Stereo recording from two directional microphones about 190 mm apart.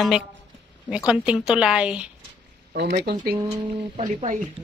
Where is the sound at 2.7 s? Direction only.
55° right (ahead or behind).